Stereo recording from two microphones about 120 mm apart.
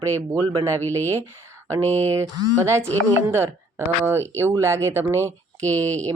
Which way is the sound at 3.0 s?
20° right (ahead or behind).